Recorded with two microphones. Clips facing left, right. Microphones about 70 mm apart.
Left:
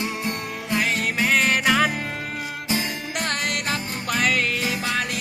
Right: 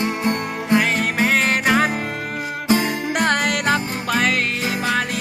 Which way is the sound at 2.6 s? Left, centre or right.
Right.